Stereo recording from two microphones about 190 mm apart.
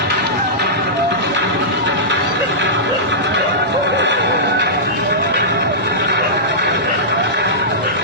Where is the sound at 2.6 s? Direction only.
70° right (ahead or behind).